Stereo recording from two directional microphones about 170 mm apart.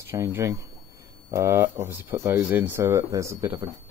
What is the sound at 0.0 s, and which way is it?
Speech, 15° right (ahead or behind).